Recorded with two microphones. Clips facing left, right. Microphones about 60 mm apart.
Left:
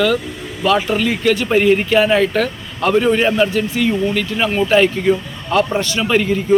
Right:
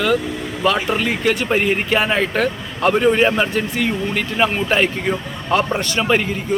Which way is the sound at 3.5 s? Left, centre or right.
Right.